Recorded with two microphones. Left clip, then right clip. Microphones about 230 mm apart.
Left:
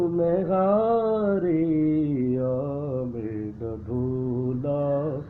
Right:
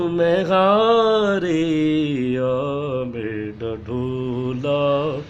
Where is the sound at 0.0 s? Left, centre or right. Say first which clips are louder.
Right 5 dB; right.